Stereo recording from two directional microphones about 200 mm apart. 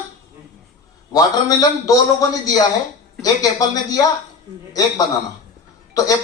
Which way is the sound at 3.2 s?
15° left (ahead or behind).